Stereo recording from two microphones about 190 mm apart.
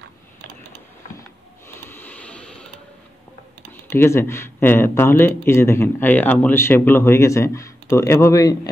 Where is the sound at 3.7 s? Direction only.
10° left (ahead or behind).